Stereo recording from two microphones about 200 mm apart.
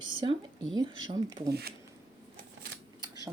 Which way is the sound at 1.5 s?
50° right (ahead or behind).